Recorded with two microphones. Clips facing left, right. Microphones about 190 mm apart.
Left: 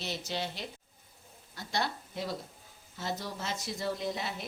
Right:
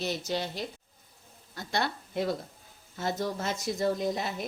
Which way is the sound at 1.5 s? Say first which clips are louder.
Right 3 dB; 55° right (ahead or behind).